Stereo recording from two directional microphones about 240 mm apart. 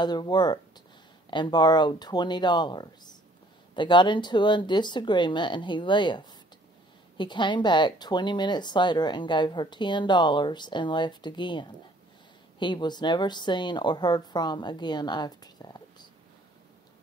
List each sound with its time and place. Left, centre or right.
0.0 s speech: centre